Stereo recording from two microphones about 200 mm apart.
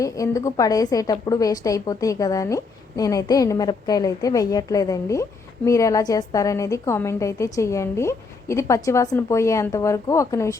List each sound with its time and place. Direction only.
0.0 s a woman's voice: 15° left (ahead or behind)